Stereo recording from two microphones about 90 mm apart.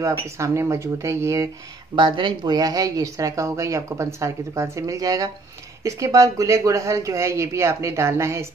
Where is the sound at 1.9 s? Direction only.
65° right (ahead or behind).